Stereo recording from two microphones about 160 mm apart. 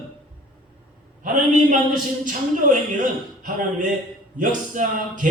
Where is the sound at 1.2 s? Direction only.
55° right (ahead or behind).